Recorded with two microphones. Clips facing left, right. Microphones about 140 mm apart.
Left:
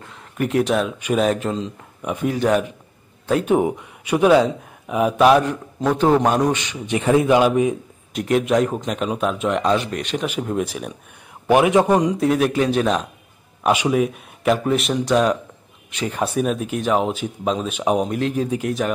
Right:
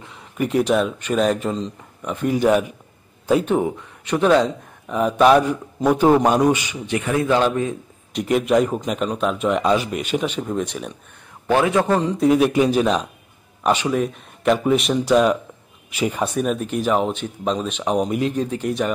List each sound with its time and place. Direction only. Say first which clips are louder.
0.0 s speech: even; centre (ahead or behind)
2.3 s speech: right 2 dB; 5° right (ahead or behind)
3.4 s speech: left 2 dB; 10° left (ahead or behind); by 6.8 s 5° right (ahead or behind)
6.9 s a man's voice: left 4 dB; 25° left (ahead or behind)
8.1 s speech: even; centre (ahead or behind)
10.3 s speech: left 1 dB; 5° left (ahead or behind)
11.4 s a man's voice: left 3 dB; 15° left (ahead or behind)
12.2 s speech: right 2 dB; centre (ahead or behind)
13.7 s speech: left 1 dB; 10° left (ahead or behind)